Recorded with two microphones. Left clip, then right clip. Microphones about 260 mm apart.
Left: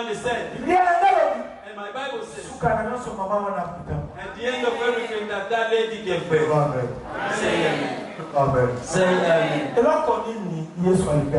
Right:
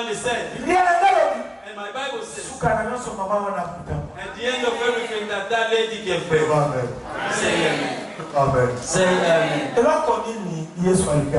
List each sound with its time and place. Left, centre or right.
0.0 s a sound: centre
2.0 s a man's voice: centre
7.2 s a man's voice: centre